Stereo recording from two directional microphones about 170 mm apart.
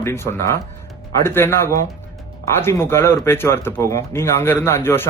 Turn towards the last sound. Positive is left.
turn(degrees=15)  # may be behind; listen again after turning